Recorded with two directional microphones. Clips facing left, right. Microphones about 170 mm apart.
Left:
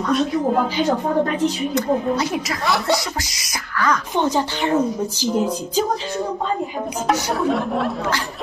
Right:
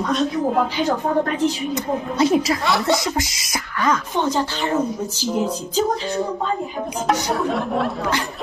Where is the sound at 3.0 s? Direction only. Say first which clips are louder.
Right 5 dB; 20° right (ahead or behind).